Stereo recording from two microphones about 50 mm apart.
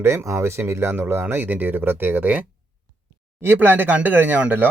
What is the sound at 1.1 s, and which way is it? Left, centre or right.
Speech, right.